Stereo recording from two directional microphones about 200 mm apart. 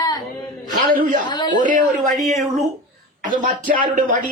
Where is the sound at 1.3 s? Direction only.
20° left (ahead or behind).